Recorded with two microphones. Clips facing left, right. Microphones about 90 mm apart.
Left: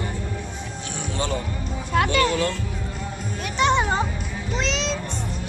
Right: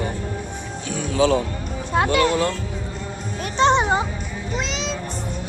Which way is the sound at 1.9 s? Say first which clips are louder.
Right 2 dB; 25° right (ahead or behind).